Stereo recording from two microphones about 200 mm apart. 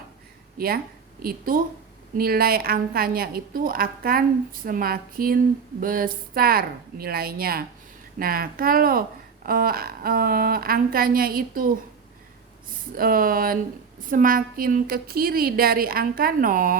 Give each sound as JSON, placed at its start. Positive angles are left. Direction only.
{"t": 1.2, "sound": "a woman's voice", "side_deg": -45}
{"t": 13.0, "sound": "a woman's voice", "side_deg": -45}